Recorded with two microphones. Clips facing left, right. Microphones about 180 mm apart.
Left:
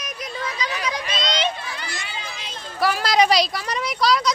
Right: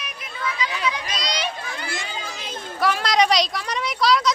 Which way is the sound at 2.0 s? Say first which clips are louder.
Right 2 dB; 40° right (ahead or behind).